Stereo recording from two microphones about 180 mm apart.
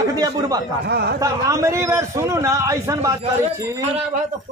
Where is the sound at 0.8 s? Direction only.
65° right (ahead or behind).